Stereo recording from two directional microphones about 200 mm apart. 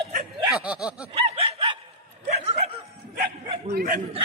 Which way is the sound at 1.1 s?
30° right (ahead or behind).